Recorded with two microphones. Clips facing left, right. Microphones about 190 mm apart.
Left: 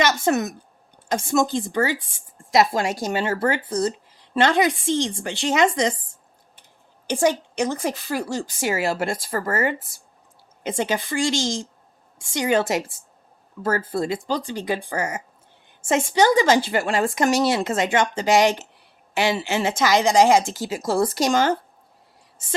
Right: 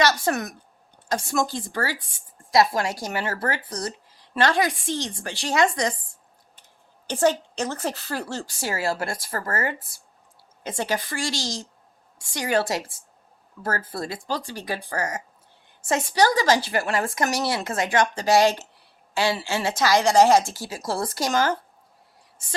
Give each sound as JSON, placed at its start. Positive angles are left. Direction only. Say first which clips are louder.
{"t": 0.0, "sound": "a sound", "louder": "left 2 dB", "side_deg": 20}
{"t": 1.0, "sound": "speech", "louder": "left 4 dB", "side_deg": 20}
{"t": 7.1, "sound": "a woman's voice", "louder": "left 1 dB", "side_deg": 15}